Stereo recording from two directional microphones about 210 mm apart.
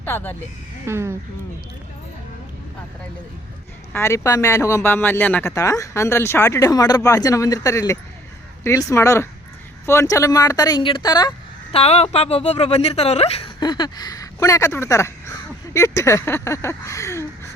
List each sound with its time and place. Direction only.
0.0 s speech: 10° left (ahead or behind)
0.9 s speech: 10° right (ahead or behind)
3.9 s speech: 10° left (ahead or behind)